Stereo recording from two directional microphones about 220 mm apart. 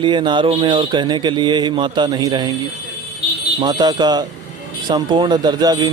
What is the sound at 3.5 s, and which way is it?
Speech, 20° right (ahead or behind).